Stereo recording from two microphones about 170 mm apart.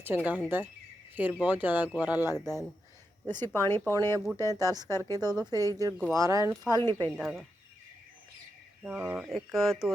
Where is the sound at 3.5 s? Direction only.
15° left (ahead or behind).